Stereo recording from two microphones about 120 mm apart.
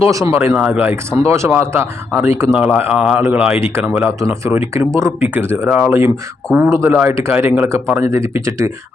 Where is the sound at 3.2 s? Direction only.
20° right (ahead or behind).